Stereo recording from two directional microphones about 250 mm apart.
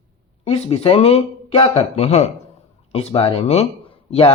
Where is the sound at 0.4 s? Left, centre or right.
Left.